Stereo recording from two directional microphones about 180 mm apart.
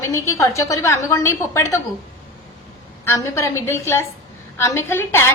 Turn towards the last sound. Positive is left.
turn(degrees=15)  # may be behind; listen again after turning